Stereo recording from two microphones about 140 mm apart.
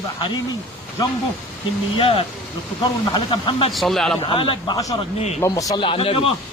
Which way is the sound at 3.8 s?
Centre (ahead or behind).